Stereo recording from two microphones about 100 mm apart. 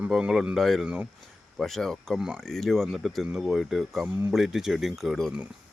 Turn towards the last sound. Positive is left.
turn(degrees=0)  # may be behind; listen again after turning